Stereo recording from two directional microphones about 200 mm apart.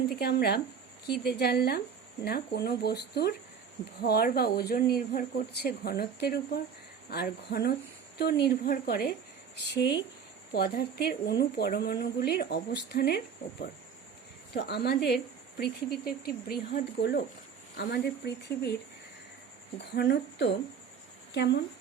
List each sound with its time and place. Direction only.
0.2 s a woman's voice: 55° left (ahead or behind)
19.8 s speech: 55° left (ahead or behind)